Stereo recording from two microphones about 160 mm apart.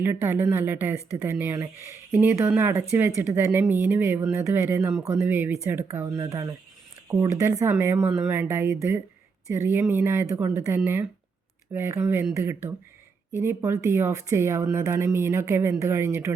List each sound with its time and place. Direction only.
0.0 s speech: 15° right (ahead or behind)